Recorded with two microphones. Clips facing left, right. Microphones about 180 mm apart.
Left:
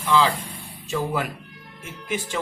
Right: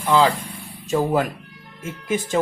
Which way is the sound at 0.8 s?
45° right (ahead or behind).